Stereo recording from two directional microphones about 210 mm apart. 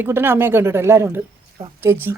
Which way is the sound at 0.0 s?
10° right (ahead or behind).